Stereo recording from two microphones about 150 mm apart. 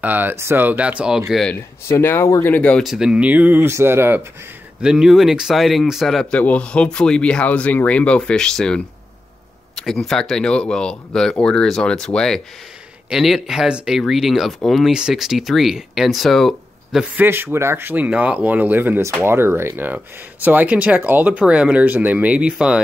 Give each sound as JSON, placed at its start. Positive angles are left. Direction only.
{"t": 0.0, "sound": "speech", "side_deg": -10}
{"t": 1.5, "sound": "speech", "side_deg": 15}
{"t": 4.8, "sound": "speech", "side_deg": -5}
{"t": 17.2, "sound": "speech", "side_deg": -15}